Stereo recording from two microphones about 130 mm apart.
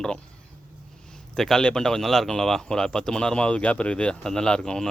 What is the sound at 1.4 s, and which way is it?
Speech, 5° left (ahead or behind).